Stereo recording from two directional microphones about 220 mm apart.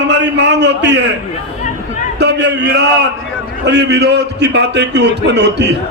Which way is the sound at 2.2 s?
50° right (ahead or behind).